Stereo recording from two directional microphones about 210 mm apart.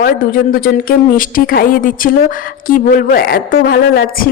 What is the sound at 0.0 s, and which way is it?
A woman's voice, 45° left (ahead or behind).